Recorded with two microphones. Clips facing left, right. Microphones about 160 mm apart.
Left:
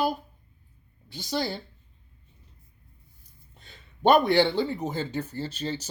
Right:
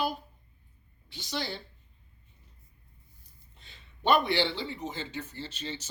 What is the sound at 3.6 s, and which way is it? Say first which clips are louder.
Speech: left 6 dB; 45° left (ahead or behind).